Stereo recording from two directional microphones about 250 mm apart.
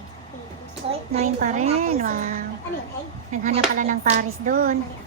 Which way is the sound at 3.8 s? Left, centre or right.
Right.